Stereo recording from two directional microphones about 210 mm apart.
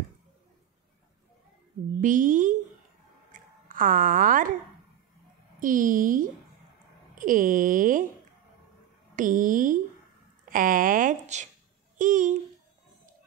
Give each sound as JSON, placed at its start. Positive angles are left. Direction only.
{"t": 2.0, "sound": "speech", "side_deg": -40}
{"t": 3.3, "sound": "a sound", "side_deg": -40}
{"t": 5.6, "sound": "speech", "side_deg": -40}
{"t": 9.1, "sound": "speech", "side_deg": -40}